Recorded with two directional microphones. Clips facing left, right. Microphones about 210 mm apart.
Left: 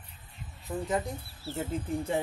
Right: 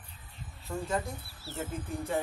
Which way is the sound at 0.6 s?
20° left (ahead or behind).